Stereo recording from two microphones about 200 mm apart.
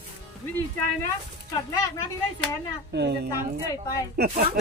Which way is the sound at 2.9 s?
60° right (ahead or behind).